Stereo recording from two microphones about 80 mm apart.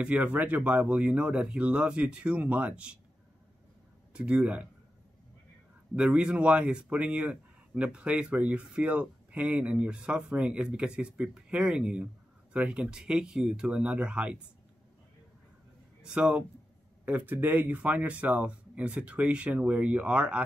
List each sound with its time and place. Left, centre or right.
0.0 s speech: centre
4.1 s speech: centre
5.9 s speech: centre
16.0 s speech: centre